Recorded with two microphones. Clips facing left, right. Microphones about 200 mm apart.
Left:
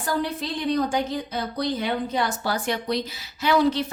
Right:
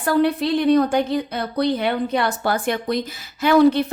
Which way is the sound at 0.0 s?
65° right (ahead or behind).